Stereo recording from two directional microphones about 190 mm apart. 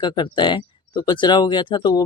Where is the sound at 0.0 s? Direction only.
25° left (ahead or behind).